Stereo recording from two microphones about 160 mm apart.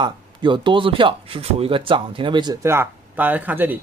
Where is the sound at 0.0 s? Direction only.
30° right (ahead or behind).